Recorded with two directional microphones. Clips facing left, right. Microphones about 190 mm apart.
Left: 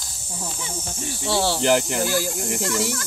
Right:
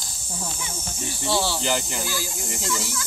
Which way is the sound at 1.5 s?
65° left (ahead or behind).